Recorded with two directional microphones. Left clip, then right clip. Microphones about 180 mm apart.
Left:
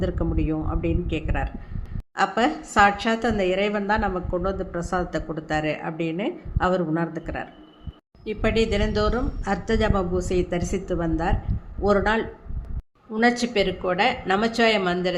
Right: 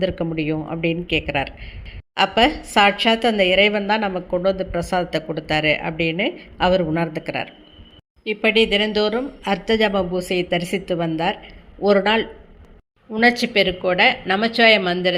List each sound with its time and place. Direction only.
0.0 s a woman's voice: 15° right (ahead or behind)
8.2 s a woman's voice: 10° right (ahead or behind)